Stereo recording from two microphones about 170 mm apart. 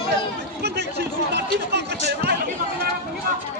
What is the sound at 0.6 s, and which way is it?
Chatter, 75° right (ahead or behind).